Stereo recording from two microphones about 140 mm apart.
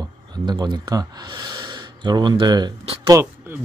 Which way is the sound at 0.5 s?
30° right (ahead or behind).